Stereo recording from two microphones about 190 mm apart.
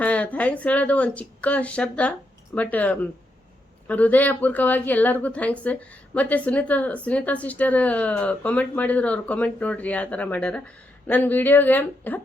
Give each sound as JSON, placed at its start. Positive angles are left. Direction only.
{"t": 0.0, "sound": "speech", "side_deg": 5}